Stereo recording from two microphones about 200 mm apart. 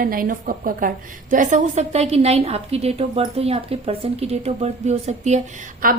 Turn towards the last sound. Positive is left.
turn(degrees=-45)  # may be behind; listen again after turning